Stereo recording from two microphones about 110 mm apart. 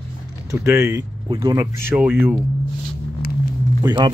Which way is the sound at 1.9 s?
10° right (ahead or behind).